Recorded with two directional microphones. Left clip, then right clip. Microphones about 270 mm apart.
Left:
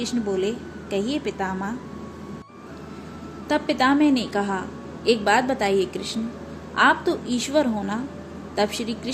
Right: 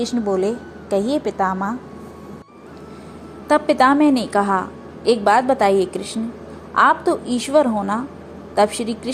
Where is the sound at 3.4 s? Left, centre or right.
Centre.